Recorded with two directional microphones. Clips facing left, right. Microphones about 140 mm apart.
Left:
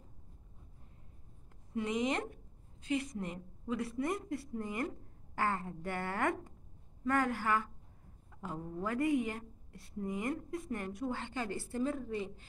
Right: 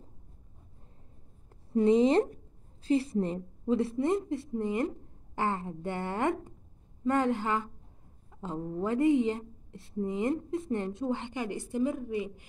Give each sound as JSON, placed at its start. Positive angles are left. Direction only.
{"t": 1.7, "sound": "a woman's voice", "side_deg": -30}